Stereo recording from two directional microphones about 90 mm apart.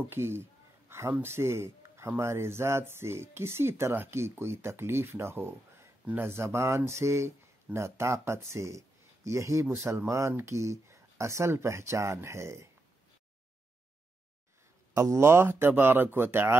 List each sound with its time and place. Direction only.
0.1 s a sound: 30° right (ahead or behind)
1.1 s speech: 25° right (ahead or behind)
15.0 s speech: 35° right (ahead or behind)